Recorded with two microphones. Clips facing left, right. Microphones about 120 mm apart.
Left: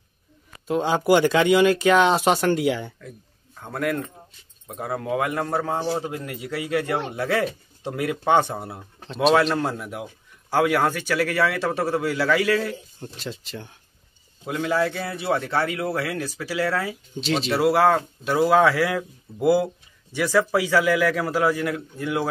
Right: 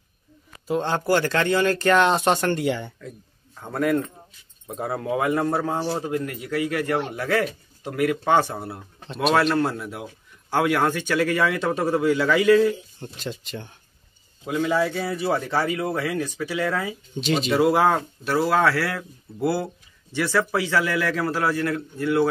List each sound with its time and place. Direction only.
0.7 s speech: 5° left (ahead or behind)
5.9 s speech: 10° left (ahead or behind)
9.0 s speech: centre (ahead or behind)
9.7 s speech: 15° left (ahead or behind)
16.6 s speech: 15° right (ahead or behind)
17.1 s speech: centre (ahead or behind)
18.2 s speech: 15° left (ahead or behind)